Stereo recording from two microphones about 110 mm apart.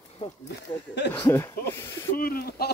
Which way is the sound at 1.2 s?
25° left (ahead or behind).